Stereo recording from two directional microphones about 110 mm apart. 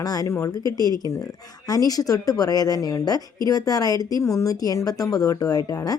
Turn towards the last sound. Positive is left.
turn(degrees=30)  # may be behind; listen again after turning